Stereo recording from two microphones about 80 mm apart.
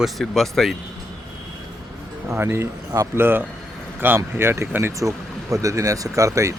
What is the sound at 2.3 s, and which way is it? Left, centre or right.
Speech, right.